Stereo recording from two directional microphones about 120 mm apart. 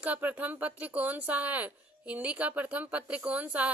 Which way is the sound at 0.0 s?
15° right (ahead or behind).